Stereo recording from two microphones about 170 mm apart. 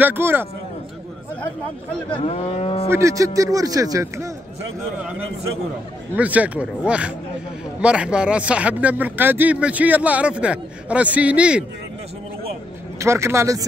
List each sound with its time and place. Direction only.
0.0 s speech: 10° right (ahead or behind)
2.0 s moo: 35° left (ahead or behind)
2.9 s speech: 20° right (ahead or behind)
6.1 s speech: 10° right (ahead or behind)
13.0 s speech: 15° right (ahead or behind)